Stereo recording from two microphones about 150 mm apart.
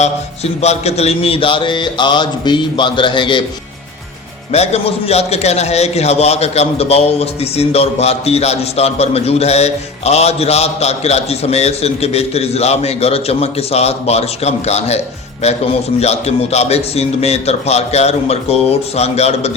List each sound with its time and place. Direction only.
0.0 s mantra: 45° left (ahead or behind)
4.5 s a man's voice: 45° left (ahead or behind)